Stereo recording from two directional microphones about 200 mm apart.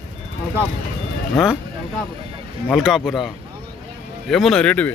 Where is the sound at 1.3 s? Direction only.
Centre (ahead or behind).